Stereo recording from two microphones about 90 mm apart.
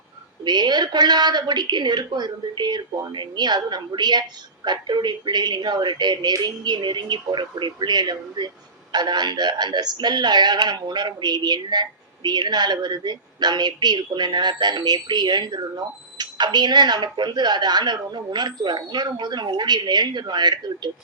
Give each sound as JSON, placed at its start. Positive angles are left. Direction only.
{"t": 0.4, "sound": "speech", "side_deg": -50}